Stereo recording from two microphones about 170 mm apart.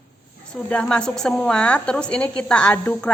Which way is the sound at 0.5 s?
5° left (ahead or behind).